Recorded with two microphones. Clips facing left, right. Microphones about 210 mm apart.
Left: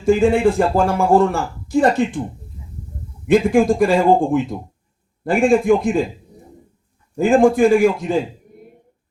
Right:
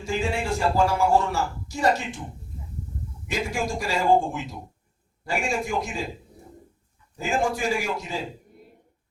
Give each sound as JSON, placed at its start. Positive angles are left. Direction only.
{"t": 0.0, "sound": "a man's voice", "side_deg": 55}
{"t": 3.2, "sound": "a man's voice", "side_deg": 55}
{"t": 7.2, "sound": "a man's voice", "side_deg": 55}